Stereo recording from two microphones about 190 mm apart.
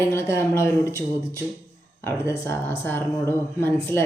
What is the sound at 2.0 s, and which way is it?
Speech, 15° left (ahead or behind).